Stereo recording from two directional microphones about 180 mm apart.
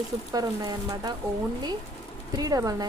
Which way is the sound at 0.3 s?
20° right (ahead or behind).